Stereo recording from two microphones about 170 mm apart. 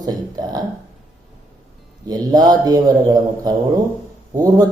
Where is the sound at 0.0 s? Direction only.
25° right (ahead or behind).